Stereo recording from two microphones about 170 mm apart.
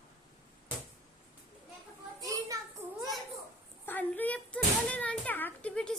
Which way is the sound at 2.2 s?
20° right (ahead or behind).